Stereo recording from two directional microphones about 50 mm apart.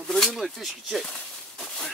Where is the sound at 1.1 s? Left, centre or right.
Centre.